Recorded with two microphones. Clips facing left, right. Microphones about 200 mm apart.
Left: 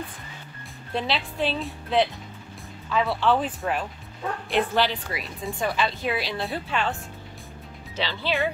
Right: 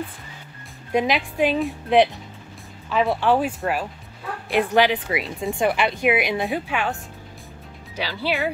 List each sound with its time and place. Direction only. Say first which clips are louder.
0.9 s speech: right 6 dB; 15° right (ahead or behind)